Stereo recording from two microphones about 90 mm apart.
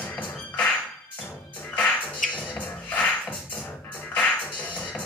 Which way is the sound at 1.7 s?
15° left (ahead or behind).